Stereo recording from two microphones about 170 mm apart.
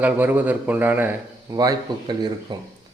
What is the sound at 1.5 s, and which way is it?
Speech, 25° right (ahead or behind).